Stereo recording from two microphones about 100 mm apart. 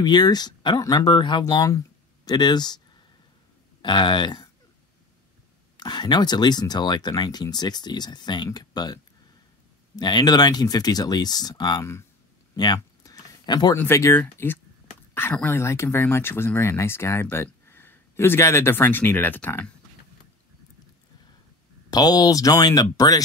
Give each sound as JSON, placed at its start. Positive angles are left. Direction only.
{"t": 0.0, "sound": "speech", "side_deg": 45}
{"t": 3.8, "sound": "speech", "side_deg": 50}
{"t": 5.8, "sound": "speech", "side_deg": 45}
{"t": 12.5, "sound": "a sound", "side_deg": 40}
{"t": 13.7, "sound": "speech", "side_deg": 25}
{"t": 21.9, "sound": "speech", "side_deg": 40}